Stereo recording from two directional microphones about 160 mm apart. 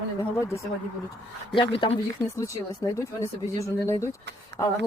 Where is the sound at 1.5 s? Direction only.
35° left (ahead or behind).